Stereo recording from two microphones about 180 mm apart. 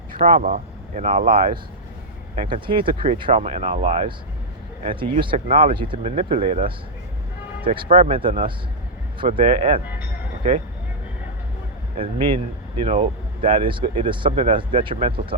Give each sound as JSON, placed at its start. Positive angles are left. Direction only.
{"t": 0.1, "sound": "speech", "side_deg": -45}
{"t": 2.5, "sound": "speech", "side_deg": -25}
{"t": 11.9, "sound": "speech", "side_deg": -30}